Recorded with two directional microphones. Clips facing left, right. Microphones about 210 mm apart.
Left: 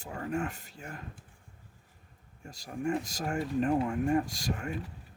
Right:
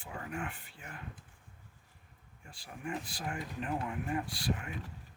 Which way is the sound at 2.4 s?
40° left (ahead or behind).